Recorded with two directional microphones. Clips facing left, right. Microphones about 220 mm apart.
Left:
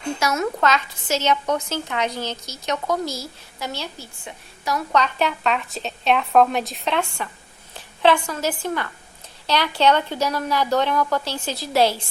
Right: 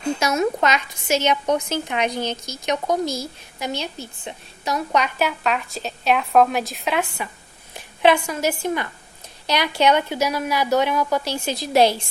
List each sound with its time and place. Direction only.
0.2 s a woman's voice: 20° right (ahead or behind)